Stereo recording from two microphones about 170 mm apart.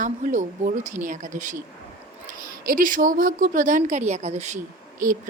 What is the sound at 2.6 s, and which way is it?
A woman's voice, 55° right (ahead or behind).